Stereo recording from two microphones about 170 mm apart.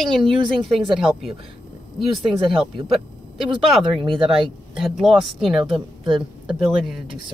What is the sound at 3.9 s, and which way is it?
Speech, 30° right (ahead or behind).